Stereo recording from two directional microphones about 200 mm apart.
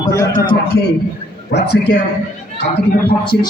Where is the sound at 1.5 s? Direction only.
55° left (ahead or behind).